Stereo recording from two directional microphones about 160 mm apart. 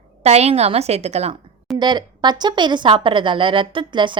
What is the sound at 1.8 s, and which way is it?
Speech, 25° right (ahead or behind).